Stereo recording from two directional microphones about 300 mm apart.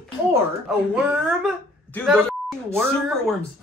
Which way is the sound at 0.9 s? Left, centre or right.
Centre.